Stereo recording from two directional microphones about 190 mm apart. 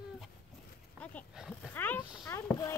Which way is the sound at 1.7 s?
10° left (ahead or behind).